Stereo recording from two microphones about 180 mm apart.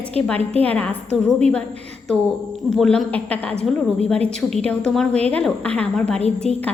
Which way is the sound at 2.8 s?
5° left (ahead or behind).